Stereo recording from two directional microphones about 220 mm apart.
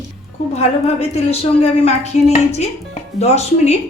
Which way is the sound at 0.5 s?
30° left (ahead or behind).